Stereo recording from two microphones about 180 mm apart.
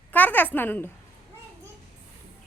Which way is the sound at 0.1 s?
10° left (ahead or behind).